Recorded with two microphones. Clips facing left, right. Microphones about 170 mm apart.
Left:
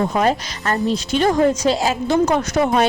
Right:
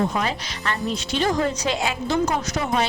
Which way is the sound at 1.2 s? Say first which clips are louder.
Left 6 dB; 50° left (ahead or behind).